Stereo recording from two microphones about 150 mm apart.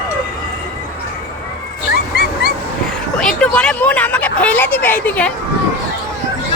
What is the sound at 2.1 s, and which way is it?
Dog, 90° left.